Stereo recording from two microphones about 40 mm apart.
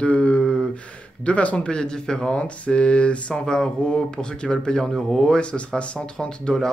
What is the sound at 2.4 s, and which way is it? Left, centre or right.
Speech, left.